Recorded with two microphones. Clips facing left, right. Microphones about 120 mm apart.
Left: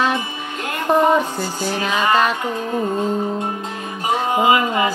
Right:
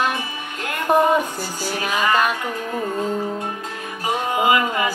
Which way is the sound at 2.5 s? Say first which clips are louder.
Left 4 dB; 25° left (ahead or behind).